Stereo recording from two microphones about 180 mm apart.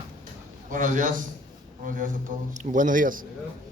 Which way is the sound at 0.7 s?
45° right (ahead or behind).